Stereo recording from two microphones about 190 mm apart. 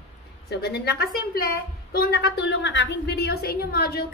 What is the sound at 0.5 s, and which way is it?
A woman's voice, 55° left (ahead or behind).